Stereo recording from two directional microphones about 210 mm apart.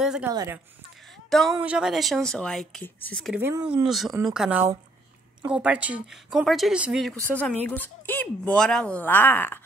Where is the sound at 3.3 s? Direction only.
10° right (ahead or behind).